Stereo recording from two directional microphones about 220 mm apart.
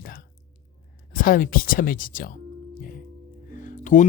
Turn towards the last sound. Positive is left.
turn(degrees=35)  # may be behind; listen again after turning